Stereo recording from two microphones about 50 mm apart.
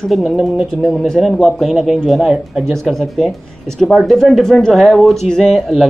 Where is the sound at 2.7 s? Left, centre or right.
Centre.